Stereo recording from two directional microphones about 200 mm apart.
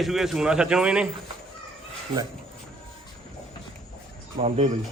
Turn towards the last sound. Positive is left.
turn(degrees=-30)  # may be behind; listen again after turning